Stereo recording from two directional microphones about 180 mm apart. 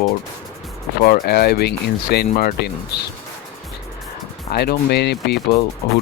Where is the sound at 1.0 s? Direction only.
60° left (ahead or behind).